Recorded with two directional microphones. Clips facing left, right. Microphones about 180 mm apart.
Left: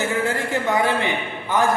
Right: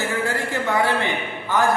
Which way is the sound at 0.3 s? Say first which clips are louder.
Left 1 dB; 20° left (ahead or behind).